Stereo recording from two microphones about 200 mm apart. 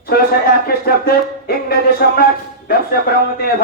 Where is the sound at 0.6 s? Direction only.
50° left (ahead or behind).